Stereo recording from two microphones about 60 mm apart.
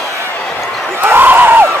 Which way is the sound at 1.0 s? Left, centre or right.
Right.